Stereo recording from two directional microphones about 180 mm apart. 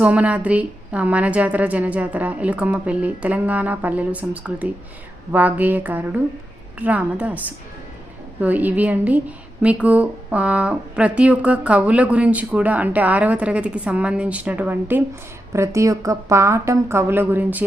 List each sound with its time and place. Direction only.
0.0 s a woman's voice: 5° right (ahead or behind)